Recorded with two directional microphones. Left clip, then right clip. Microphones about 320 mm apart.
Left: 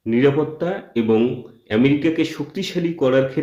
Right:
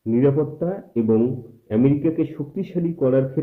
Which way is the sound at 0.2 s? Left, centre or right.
Centre.